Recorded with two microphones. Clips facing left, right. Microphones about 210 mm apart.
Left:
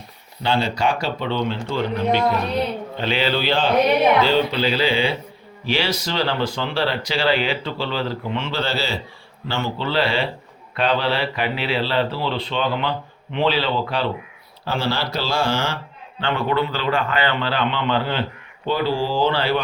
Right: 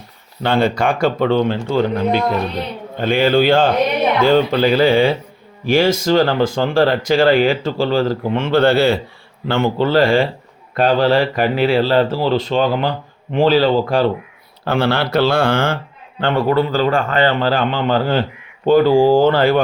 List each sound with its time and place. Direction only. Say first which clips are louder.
0.4 s speech: right 5 dB; 55° right (ahead or behind)
14.6 s speech: right 7 dB; 60° right (ahead or behind)
16.5 s speech: right 6 dB; 40° right (ahead or behind)